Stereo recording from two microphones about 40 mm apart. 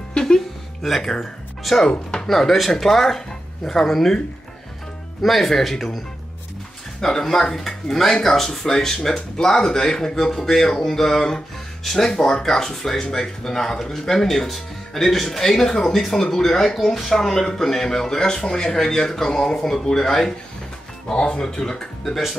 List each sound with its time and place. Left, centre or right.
0.1 s music: centre
0.8 s speech: centre
1.9 s speech: left
2.2 s speech: centre
5.2 s speech: centre
7.0 s speech: centre